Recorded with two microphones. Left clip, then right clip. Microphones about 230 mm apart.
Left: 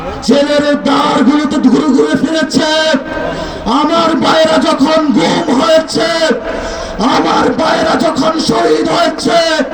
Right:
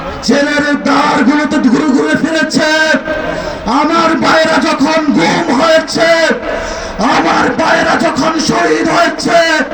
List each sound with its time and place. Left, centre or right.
0.3 s speech: left
3.7 s a sound: left
5.2 s music: left
7.0 s speech: left
8.5 s music: left